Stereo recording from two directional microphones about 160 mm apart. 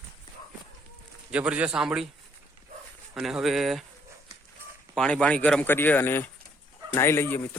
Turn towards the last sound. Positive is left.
turn(degrees=15)  # may be behind; listen again after turning